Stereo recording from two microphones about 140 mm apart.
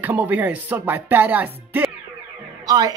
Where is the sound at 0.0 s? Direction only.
10° right (ahead or behind).